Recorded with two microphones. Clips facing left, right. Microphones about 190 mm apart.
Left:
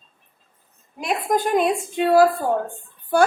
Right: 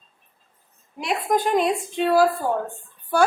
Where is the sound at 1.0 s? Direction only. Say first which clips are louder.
Left 1 dB; 45° left (ahead or behind).